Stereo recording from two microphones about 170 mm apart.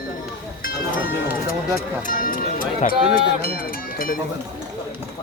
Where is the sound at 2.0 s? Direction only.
55° left (ahead or behind).